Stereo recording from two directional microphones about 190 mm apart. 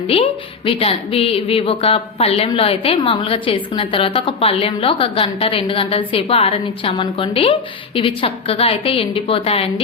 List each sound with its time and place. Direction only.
0.1 s a woman's voice: 30° left (ahead or behind)